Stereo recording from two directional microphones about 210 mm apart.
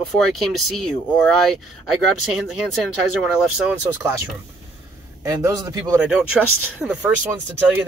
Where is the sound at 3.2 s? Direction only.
5° right (ahead or behind).